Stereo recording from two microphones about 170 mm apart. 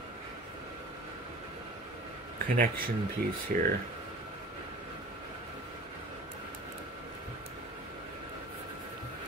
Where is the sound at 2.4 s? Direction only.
55° right (ahead or behind).